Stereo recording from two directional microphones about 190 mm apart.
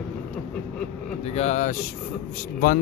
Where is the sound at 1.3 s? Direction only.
35° left (ahead or behind).